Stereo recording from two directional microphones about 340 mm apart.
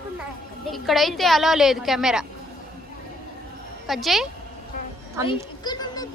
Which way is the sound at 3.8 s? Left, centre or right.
Centre.